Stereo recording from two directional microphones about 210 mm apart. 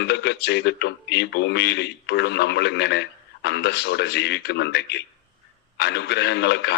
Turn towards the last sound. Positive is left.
turn(degrees=55)  # may be behind; listen again after turning